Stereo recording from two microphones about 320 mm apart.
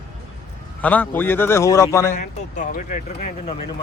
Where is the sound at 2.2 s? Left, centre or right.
Left.